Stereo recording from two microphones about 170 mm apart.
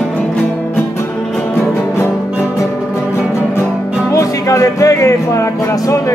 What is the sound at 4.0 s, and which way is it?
Speech, 15° left (ahead or behind).